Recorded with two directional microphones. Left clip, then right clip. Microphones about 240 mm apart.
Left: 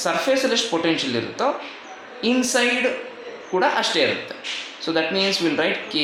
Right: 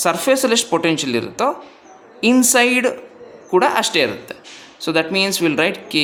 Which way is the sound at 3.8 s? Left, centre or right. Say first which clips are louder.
Right 3 dB; right.